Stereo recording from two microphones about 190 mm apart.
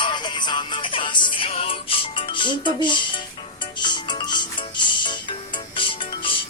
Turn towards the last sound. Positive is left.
turn(degrees=25)  # may be behind; listen again after turning